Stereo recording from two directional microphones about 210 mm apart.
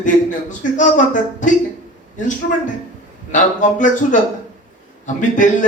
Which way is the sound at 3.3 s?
35° left (ahead or behind).